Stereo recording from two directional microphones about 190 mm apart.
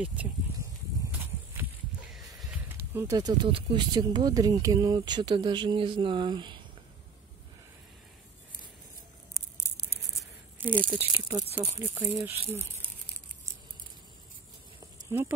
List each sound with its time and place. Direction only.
0.0 s speech: 10° right (ahead or behind)
2.1 s a sound: centre (ahead or behind)
2.9 s speech: 15° right (ahead or behind)
10.6 s speech: 10° right (ahead or behind)
15.0 s speech: 10° right (ahead or behind)